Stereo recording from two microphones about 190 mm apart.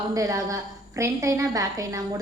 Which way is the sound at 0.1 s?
15° right (ahead or behind).